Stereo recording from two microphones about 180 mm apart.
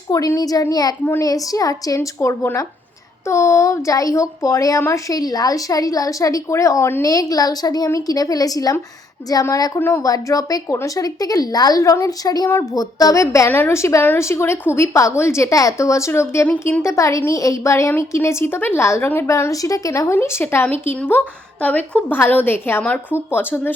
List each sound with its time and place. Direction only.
0.1 s a woman's voice: 20° left (ahead or behind)